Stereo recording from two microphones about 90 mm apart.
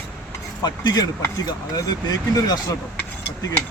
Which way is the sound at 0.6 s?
50° left (ahead or behind).